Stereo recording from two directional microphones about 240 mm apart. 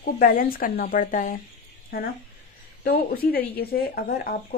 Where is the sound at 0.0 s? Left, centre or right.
Left.